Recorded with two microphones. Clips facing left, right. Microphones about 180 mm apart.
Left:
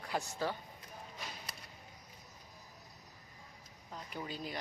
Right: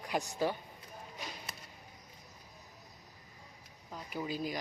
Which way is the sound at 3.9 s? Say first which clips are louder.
Right 5 dB; 10° right (ahead or behind).